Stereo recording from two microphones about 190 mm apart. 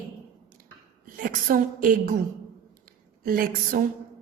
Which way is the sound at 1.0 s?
45° right (ahead or behind).